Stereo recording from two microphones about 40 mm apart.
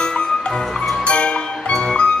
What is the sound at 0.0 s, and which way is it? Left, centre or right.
Music, centre.